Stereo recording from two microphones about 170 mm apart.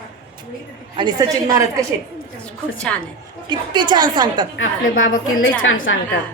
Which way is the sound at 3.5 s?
25° right (ahead or behind).